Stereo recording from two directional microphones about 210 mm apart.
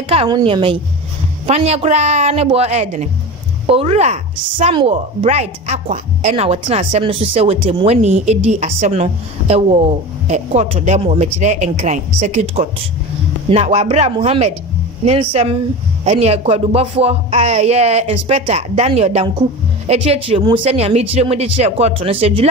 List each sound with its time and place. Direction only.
0.1 s a woman's voice: 25° right (ahead or behind)